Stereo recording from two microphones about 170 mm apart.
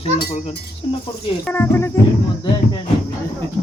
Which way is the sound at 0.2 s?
55° left (ahead or behind).